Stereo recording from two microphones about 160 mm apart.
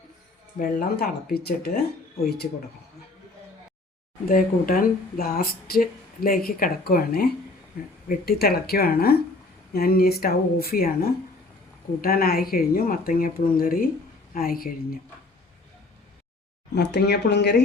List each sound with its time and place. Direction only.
0.6 s speech: 70° left (ahead or behind)
4.3 s speech: 60° left (ahead or behind)
16.7 s speech: 90° left